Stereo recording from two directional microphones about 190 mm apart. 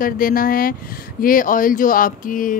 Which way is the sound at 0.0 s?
50° left (ahead or behind).